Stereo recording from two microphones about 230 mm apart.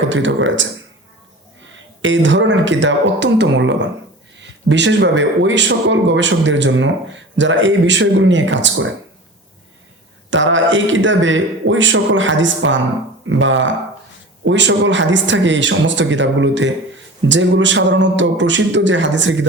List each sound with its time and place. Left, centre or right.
0.1 s speech: right
2.0 s speech: right
10.2 s speech: right